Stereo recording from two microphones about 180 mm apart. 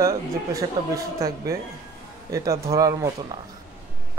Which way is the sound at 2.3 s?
20° right (ahead or behind).